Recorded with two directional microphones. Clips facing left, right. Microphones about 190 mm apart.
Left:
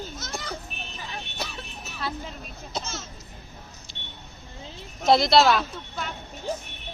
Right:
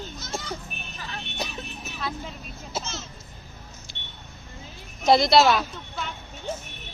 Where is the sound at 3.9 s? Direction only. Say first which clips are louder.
Even; centre (ahead or behind).